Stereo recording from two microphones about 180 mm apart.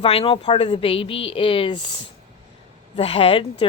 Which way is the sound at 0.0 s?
35° left (ahead or behind).